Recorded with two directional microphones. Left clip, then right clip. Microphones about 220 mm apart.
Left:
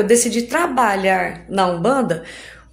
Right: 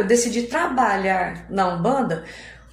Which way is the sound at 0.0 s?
50° left (ahead or behind).